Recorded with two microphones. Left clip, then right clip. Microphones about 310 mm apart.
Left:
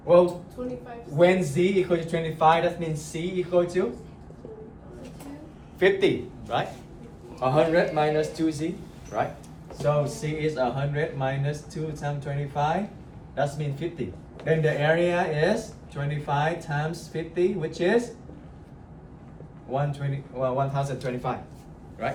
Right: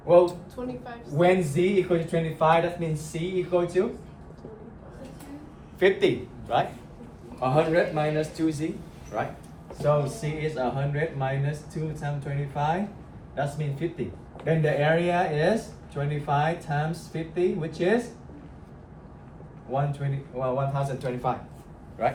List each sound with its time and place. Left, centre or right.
0.1 s speech: centre
0.6 s a woman's voice: right
1.1 s speech: centre
5.8 s speech: centre
19.7 s speech: centre
22.0 s speech: centre